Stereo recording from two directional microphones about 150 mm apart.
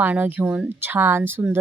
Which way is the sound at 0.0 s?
10° right (ahead or behind).